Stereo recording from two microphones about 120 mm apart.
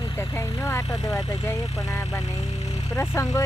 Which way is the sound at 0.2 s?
20° left (ahead or behind).